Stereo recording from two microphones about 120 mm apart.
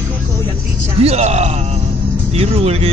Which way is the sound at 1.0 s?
60° right (ahead or behind).